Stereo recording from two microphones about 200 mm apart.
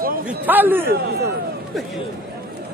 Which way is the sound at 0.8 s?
50° right (ahead or behind).